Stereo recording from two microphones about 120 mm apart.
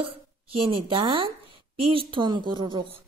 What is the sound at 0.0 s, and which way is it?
Speech, 50° right (ahead or behind).